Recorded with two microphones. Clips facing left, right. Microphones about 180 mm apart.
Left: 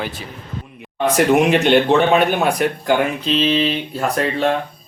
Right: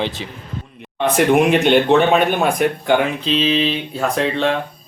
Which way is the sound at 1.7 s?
Centre (ahead or behind).